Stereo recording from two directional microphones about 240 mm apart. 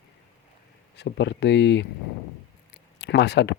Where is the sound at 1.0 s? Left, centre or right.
Left.